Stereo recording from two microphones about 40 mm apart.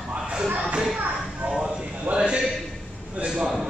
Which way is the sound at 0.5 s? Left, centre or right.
Right.